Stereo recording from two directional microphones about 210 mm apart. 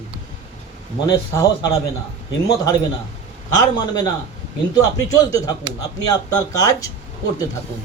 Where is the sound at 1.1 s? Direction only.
15° left (ahead or behind).